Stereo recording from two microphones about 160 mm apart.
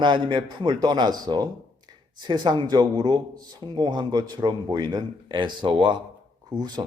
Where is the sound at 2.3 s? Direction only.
30° right (ahead or behind).